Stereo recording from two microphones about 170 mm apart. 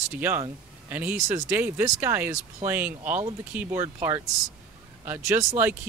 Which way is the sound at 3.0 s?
45° right (ahead or behind).